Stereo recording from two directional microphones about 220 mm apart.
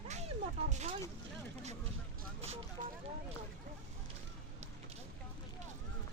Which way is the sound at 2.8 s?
35° right (ahead or behind).